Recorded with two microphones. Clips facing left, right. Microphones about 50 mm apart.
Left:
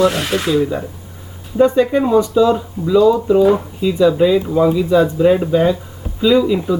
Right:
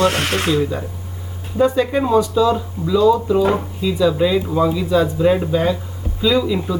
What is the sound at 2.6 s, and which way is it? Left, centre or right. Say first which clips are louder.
Speech: left 3 dB; centre.